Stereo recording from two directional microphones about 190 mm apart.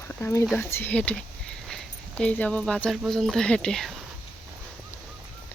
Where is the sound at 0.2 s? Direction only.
15° left (ahead or behind).